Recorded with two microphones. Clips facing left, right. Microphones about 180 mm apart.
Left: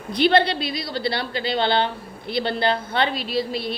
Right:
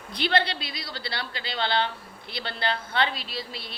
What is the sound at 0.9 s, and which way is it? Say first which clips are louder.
A woman's voice: left 8 dB; 15° left (ahead or behind).